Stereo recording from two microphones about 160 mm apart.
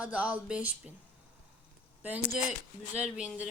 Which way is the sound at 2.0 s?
10° right (ahead or behind).